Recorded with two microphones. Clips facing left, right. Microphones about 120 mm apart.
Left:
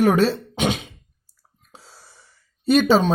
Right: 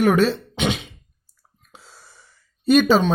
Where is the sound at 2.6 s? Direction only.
30° left (ahead or behind).